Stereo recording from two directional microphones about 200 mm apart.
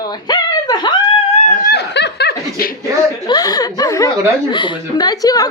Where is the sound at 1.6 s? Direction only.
60° left (ahead or behind).